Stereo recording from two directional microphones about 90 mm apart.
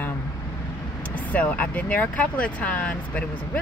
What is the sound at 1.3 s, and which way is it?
Speech, 15° left (ahead or behind).